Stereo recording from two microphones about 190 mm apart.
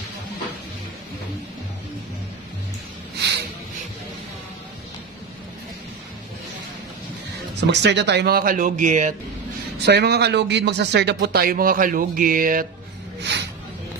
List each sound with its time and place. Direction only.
7.6 s speech: 65° right (ahead or behind); by 9.1 s 40° right (ahead or behind)
9.8 s speech: 60° right (ahead or behind)
13.2 s a sound: 65° right (ahead or behind)